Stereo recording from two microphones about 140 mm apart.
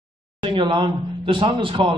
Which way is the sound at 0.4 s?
35° right (ahead or behind).